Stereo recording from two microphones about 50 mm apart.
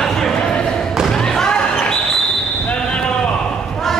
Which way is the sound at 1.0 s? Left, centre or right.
Centre.